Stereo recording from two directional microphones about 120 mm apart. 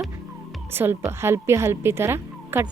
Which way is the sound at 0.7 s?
20° right (ahead or behind).